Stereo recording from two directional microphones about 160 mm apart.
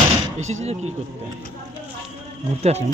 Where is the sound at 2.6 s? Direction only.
45° right (ahead or behind).